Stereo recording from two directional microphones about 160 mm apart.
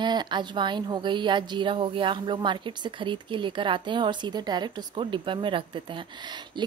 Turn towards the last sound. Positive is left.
turn(degrees=-30)  # may be behind; listen again after turning